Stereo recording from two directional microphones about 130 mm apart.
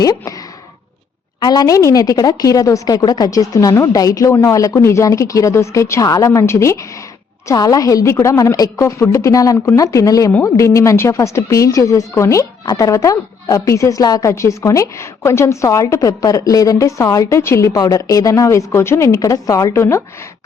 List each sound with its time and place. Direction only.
0.0 s speech: 30° left (ahead or behind)
1.4 s a woman's voice: 30° left (ahead or behind)